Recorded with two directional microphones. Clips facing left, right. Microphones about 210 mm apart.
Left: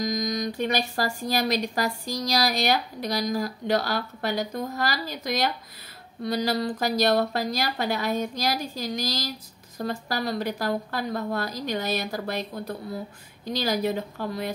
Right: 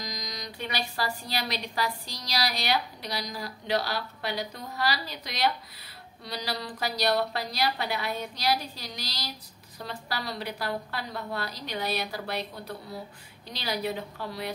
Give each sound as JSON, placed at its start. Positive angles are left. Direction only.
{"t": 0.0, "sound": "speech", "side_deg": 50}